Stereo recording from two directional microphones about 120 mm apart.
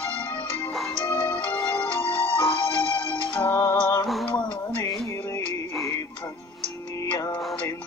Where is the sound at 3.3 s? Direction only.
20° left (ahead or behind).